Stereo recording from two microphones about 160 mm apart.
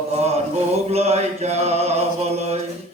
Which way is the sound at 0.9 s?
40° right (ahead or behind).